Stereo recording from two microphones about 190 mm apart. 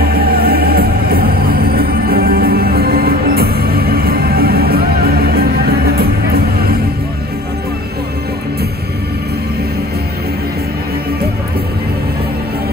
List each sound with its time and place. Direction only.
0.0 s music: 55° right (ahead or behind)